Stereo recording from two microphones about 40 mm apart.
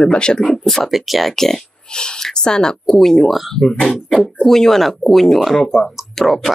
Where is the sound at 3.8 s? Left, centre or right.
Centre.